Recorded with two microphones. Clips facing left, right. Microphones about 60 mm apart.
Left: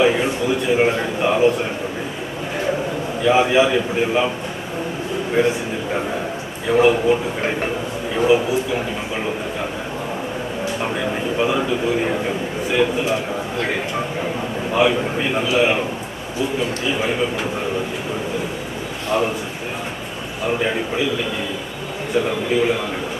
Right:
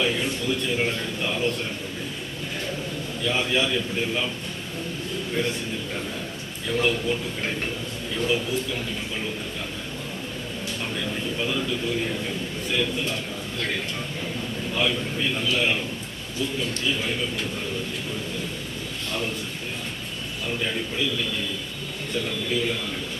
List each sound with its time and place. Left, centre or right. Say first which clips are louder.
0.0 s a man's voice: left 8 dB; left
3.2 s speech: left 10 dB; left
5.4 s a man's voice: left 10 dB; centre
6.7 s speech: left 10 dB; left
10.8 s a man's voice: left 6 dB; left
20.4 s speech: left 8 dB; left
22.3 s speech: left 6 dB; left